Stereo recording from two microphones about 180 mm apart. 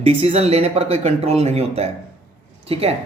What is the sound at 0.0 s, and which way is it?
Speech, 35° right (ahead or behind).